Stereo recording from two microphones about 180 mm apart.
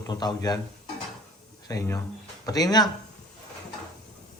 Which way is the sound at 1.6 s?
20° left (ahead or behind).